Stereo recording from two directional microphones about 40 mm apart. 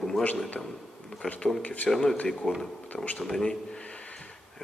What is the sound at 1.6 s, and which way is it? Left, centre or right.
Speech, left.